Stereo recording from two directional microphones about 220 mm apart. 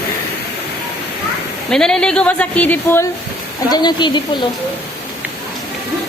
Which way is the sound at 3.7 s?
20° left (ahead or behind).